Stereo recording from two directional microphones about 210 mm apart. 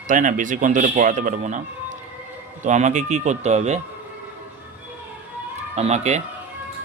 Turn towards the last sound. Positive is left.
turn(degrees=-35)  # may be behind; listen again after turning